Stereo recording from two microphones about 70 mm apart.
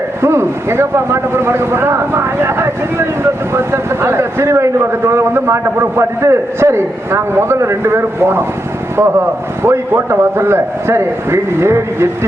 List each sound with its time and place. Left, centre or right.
0.2 s a man's voice: right